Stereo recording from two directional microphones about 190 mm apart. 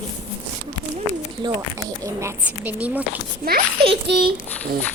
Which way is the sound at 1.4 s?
20° right (ahead or behind).